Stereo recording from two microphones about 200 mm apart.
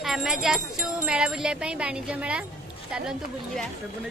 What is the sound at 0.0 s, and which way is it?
Speech, centre (ahead or behind).